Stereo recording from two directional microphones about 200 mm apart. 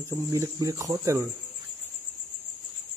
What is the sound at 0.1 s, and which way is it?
Speech, 15° right (ahead or behind).